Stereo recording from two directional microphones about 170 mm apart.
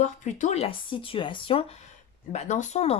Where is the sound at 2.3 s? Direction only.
45° left (ahead or behind).